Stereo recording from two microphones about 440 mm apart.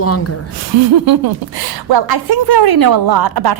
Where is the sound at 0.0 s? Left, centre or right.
Left.